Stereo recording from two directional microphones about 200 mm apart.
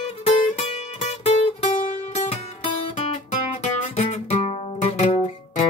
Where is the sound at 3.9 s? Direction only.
35° left (ahead or behind).